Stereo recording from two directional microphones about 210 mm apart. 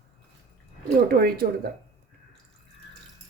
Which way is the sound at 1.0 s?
45° right (ahead or behind).